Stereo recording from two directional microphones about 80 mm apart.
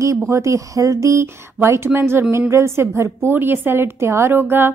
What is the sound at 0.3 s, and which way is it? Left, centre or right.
A woman's voice, right.